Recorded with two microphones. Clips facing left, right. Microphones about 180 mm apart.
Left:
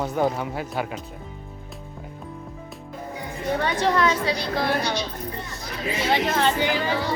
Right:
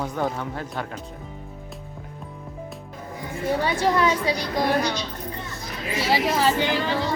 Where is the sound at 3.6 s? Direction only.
10° right (ahead or behind).